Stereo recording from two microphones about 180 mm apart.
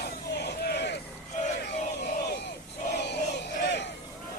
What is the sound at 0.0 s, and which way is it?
Crowd, 65° left (ahead or behind).